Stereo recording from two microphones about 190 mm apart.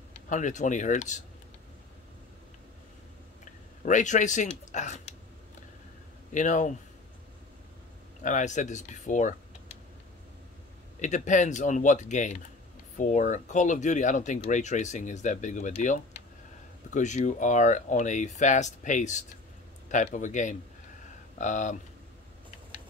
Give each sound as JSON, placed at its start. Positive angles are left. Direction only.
{"t": 0.1, "sound": "speech", "side_deg": 40}
{"t": 3.8, "sound": "speech", "side_deg": 40}
{"t": 6.3, "sound": "speech", "side_deg": 40}
{"t": 8.2, "sound": "speech", "side_deg": 40}
{"t": 11.0, "sound": "speech", "side_deg": 40}